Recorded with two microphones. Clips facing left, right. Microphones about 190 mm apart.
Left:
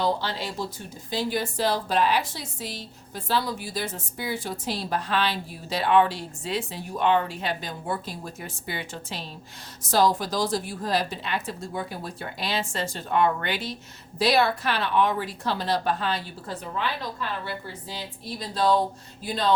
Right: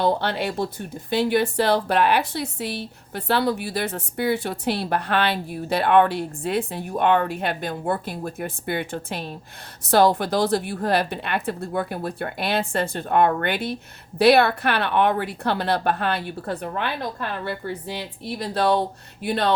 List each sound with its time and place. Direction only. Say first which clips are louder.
0.0 s speech: right 5 dB; 60° right (ahead or behind)